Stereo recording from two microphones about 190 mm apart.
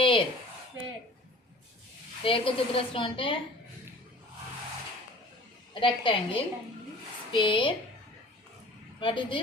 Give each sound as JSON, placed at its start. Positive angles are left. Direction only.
{"t": 0.0, "sound": "a sound", "side_deg": 25}
{"t": 2.2, "sound": "a woman's voice", "side_deg": 30}
{"t": 5.8, "sound": "a woman's voice", "side_deg": 25}
{"t": 9.0, "sound": "a woman's voice", "side_deg": 25}